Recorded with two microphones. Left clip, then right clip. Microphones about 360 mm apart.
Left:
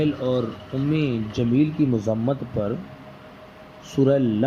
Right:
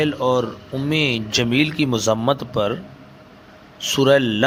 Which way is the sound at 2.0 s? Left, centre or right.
Right.